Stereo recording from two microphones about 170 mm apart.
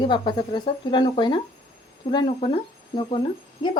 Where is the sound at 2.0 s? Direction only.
40° left (ahead or behind).